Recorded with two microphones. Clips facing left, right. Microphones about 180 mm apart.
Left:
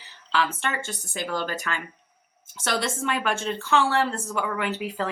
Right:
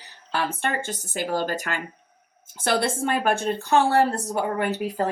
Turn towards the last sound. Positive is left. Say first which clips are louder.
# right 4 dB
turn(degrees=-45)  # may be behind; listen again after turning